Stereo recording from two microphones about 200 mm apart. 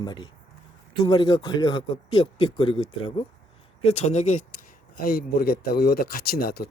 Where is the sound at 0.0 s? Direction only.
20° left (ahead or behind).